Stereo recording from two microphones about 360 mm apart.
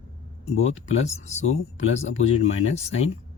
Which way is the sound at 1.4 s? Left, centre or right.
Left.